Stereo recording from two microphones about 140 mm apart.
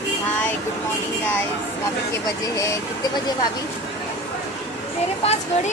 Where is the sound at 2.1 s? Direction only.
20° left (ahead or behind).